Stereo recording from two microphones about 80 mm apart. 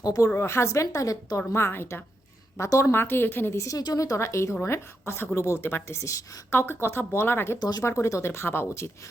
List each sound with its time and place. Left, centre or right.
0.0 s a woman's voice: left
0.3 s speech: left
1.5 s a woman's voice: left
3.6 s speech: left
7.6 s speech: left
7.9 s speech: left